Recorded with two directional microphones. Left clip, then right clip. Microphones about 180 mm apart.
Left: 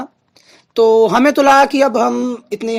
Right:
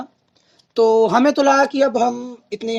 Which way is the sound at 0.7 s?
30° left (ahead or behind).